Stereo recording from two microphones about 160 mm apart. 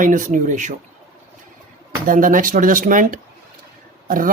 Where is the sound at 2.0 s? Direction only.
55° right (ahead or behind).